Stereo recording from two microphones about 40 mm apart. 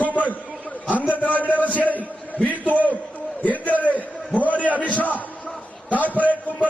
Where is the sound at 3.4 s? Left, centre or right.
Left.